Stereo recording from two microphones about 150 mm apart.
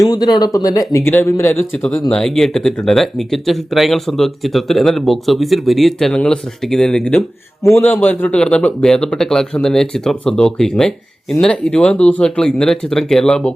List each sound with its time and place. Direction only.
0.0 s speech: 25° left (ahead or behind)
1.8 s speech: 5° left (ahead or behind)